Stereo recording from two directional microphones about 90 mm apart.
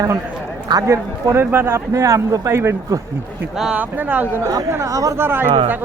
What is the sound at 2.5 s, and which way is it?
Speech, 30° right (ahead or behind).